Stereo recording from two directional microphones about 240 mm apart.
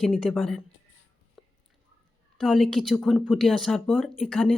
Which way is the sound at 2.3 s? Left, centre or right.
Centre.